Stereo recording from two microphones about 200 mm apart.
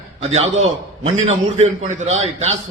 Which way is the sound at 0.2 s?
30° right (ahead or behind).